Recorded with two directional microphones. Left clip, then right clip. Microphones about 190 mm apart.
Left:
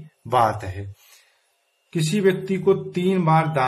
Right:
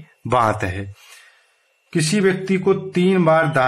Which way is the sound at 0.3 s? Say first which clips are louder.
Right 2 dB; 35° right (ahead or behind).